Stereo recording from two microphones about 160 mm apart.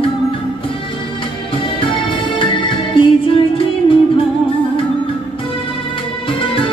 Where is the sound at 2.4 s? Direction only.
30° left (ahead or behind).